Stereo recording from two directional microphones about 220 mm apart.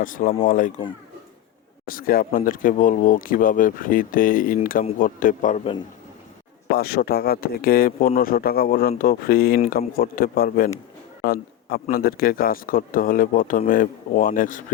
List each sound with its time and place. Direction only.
0.0 s speech: 40° left (ahead or behind)
1.9 s speech: 40° left (ahead or behind)
6.7 s speech: 45° left (ahead or behind)